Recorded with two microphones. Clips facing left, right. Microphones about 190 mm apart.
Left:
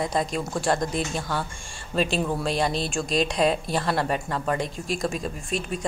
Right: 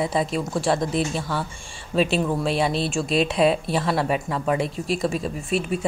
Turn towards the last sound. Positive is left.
turn(degrees=-5)  # may be behind; listen again after turning